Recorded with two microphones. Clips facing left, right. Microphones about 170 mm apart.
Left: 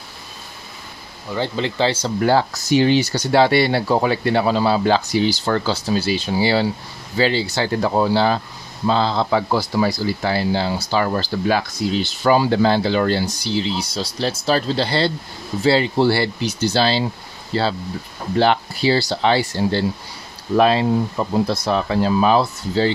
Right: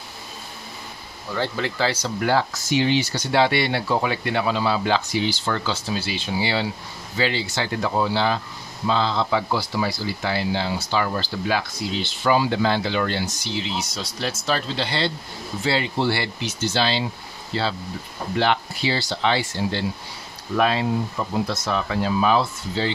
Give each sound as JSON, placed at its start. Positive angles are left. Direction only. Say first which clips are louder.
{"t": 1.3, "sound": "speech", "louder": "left 3 dB", "side_deg": 20}